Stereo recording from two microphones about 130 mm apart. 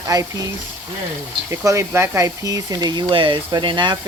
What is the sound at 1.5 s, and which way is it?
Speech, 20° right (ahead or behind).